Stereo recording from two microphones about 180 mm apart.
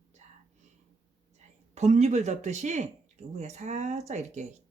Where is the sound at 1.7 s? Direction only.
40° right (ahead or behind).